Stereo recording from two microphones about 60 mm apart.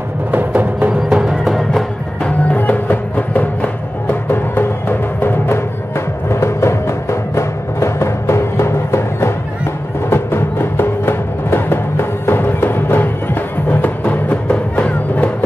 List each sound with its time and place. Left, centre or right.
0.5 s music: right
1.2 s music: centre
2.2 s music: left